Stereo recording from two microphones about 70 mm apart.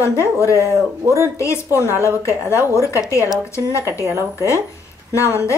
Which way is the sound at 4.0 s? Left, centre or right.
Right.